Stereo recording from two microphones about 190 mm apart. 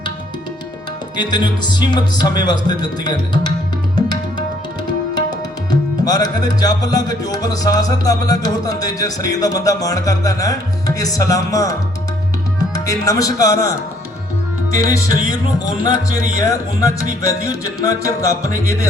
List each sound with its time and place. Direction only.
1.1 s music: 25° left (ahead or behind)
5.7 s music: 20° left (ahead or behind)
12.5 s speech: 20° left (ahead or behind)
14.7 s music: 15° left (ahead or behind)
16.4 s music: 15° left (ahead or behind)